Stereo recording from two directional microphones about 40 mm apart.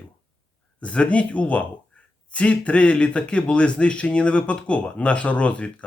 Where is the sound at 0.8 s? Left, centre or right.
Left.